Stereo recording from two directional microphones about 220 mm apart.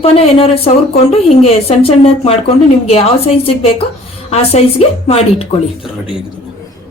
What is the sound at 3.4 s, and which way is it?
A woman's voice, 25° left (ahead or behind).